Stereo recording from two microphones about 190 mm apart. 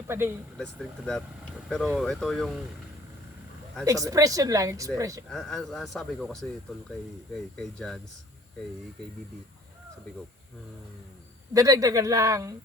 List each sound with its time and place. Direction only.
0.1 s speech: 10° right (ahead or behind)
0.6 s speech: 5° left (ahead or behind)
3.8 s speech: 20° right (ahead or behind)
5.3 s speech: centre (ahead or behind)
11.5 s speech: 15° right (ahead or behind)